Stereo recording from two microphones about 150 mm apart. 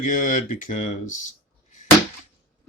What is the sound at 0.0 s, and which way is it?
Speech, 60° left (ahead or behind).